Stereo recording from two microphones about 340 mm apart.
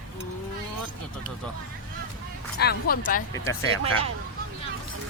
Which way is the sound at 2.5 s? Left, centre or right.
Left.